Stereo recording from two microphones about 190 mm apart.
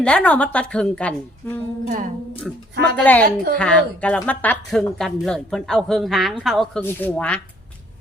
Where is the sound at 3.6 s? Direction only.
5° left (ahead or behind).